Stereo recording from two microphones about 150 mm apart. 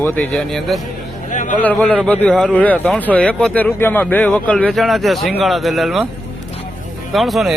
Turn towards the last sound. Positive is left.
turn(degrees=0)  # may be behind; listen again after turning